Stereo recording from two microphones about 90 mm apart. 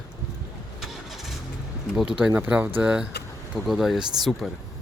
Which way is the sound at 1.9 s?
10° right (ahead or behind).